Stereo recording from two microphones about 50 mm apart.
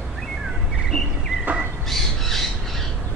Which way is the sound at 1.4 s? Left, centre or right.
Right.